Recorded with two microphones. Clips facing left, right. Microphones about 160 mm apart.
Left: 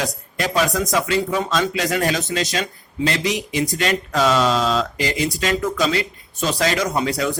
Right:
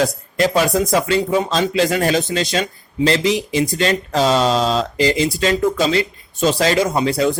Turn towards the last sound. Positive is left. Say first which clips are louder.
# right 4 dB
turn(degrees=-25)  # may be behind; listen again after turning